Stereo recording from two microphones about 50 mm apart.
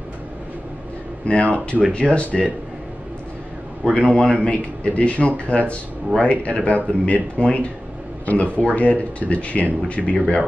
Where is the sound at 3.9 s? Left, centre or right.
Centre.